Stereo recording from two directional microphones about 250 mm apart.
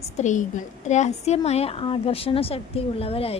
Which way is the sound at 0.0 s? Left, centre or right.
Left.